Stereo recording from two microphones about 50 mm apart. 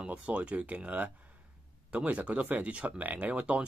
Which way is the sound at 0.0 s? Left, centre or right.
Right.